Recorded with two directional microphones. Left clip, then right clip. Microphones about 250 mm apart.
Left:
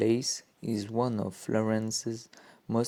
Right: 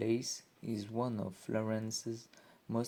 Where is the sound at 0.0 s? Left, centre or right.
Left.